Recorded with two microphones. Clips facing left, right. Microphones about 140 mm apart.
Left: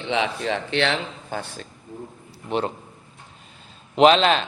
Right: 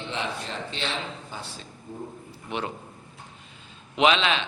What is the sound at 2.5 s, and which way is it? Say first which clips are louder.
Speech: left 7 dB; 35° left (ahead or behind).